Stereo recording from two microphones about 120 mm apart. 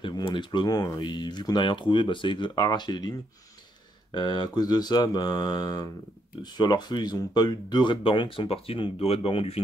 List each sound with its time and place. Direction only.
0.0 s speech: 40° left (ahead or behind)
4.1 s speech: 40° left (ahead or behind)